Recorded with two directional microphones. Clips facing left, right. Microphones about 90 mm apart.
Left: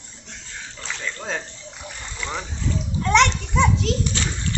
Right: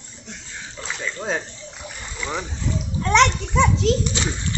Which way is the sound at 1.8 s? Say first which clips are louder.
Right 1 dB; 5° right (ahead or behind).